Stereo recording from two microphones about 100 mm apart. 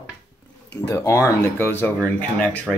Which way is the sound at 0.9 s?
30° left (ahead or behind).